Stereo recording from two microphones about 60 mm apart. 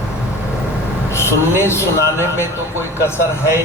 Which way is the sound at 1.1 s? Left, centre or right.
Left.